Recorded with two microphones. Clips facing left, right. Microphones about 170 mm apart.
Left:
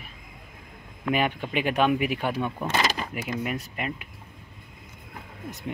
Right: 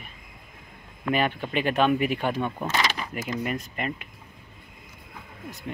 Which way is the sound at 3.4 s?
5° left (ahead or behind).